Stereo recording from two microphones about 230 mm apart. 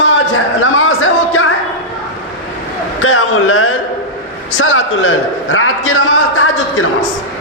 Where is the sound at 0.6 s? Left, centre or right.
Left.